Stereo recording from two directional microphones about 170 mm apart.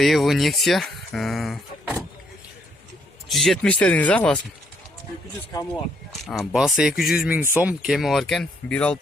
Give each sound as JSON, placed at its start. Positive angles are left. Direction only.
{"t": 0.0, "sound": "speech", "side_deg": 0}
{"t": 3.3, "sound": "speech", "side_deg": 0}
{"t": 5.5, "sound": "speech", "side_deg": 20}
{"t": 6.2, "sound": "speech", "side_deg": 0}